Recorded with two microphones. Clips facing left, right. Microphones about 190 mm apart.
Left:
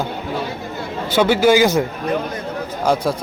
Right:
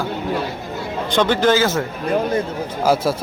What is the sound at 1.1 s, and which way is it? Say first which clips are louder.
Speech: left 2 dB; 10° left (ahead or behind).